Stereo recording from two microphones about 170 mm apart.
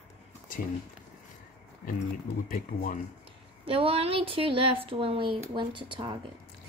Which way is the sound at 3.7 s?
35° right (ahead or behind).